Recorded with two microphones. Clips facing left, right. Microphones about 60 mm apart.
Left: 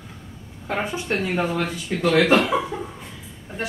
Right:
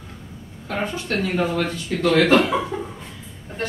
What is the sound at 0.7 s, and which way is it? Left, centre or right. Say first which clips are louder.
A woman's voice: even; centre.